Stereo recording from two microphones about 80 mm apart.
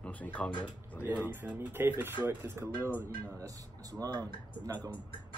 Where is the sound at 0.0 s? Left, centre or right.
Centre.